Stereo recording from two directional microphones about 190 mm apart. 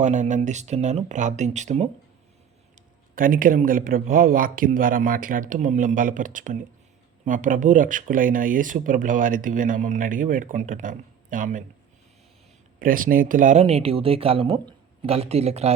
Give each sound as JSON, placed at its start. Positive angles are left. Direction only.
{"t": 0.0, "sound": "speech", "side_deg": -40}
{"t": 3.2, "sound": "speech", "side_deg": -45}
{"t": 12.8, "sound": "speech", "side_deg": -45}